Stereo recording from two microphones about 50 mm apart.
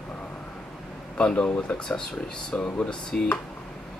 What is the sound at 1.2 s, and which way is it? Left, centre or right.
Speech, centre.